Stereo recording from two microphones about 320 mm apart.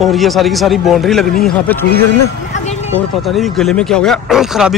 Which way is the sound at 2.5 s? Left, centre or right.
Left.